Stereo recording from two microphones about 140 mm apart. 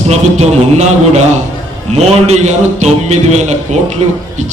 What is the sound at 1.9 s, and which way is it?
A man's voice, 50° right (ahead or behind).